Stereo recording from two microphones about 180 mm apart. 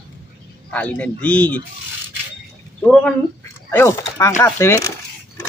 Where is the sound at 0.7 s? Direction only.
10° left (ahead or behind).